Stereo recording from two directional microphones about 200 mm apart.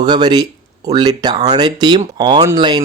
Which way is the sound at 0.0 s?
20° right (ahead or behind).